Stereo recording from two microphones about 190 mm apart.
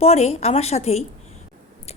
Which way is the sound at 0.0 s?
35° left (ahead or behind).